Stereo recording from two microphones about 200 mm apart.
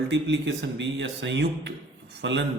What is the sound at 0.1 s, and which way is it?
A man's voice, 65° right (ahead or behind).